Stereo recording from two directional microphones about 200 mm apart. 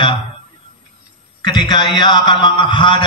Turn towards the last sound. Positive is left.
turn(degrees=25)  # may be behind; listen again after turning